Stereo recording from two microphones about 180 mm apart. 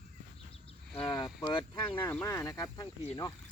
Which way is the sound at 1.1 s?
20° left (ahead or behind).